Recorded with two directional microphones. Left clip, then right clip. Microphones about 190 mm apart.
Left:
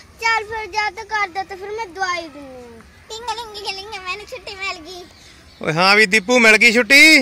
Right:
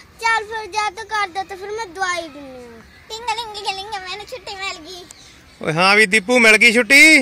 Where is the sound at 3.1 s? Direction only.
20° right (ahead or behind).